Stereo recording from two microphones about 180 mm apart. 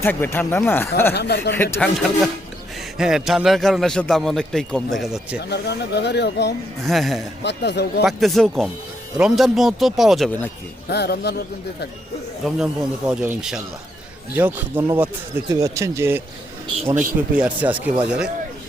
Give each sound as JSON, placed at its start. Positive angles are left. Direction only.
{"t": 0.0, "sound": "speech", "side_deg": 10}
{"t": 1.1, "sound": "speech", "side_deg": 65}
{"t": 1.5, "sound": "a man's voice", "side_deg": 10}
{"t": 5.4, "sound": "speech", "side_deg": 70}
{"t": 6.8, "sound": "a man's voice", "side_deg": 0}
{"t": 7.4, "sound": "speech", "side_deg": 70}
{"t": 8.0, "sound": "a man's voice", "side_deg": 0}
{"t": 10.8, "sound": "speech", "side_deg": 65}
{"t": 12.5, "sound": "a man's voice", "side_deg": -5}
{"t": 16.8, "sound": "a man's voice", "side_deg": -45}
{"t": 17.3, "sound": "speech", "side_deg": -5}